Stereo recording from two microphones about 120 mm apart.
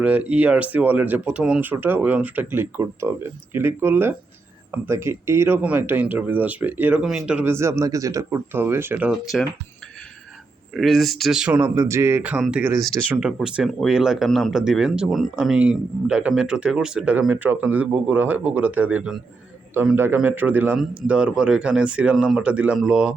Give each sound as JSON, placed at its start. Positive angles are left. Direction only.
{"t": 0.0, "sound": "speech", "side_deg": -10}
{"t": 7.5, "sound": "speech", "side_deg": -25}
{"t": 9.2, "sound": "speech", "side_deg": 0}
{"t": 10.8, "sound": "speech", "side_deg": 0}
{"t": 11.6, "sound": "speech", "side_deg": -20}